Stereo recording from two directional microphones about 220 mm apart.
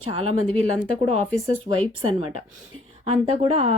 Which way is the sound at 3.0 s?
30° right (ahead or behind).